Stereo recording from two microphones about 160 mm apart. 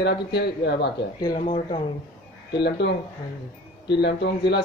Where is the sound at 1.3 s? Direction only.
55° left (ahead or behind).